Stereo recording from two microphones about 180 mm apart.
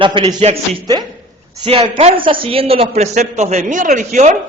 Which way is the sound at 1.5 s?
25° right (ahead or behind).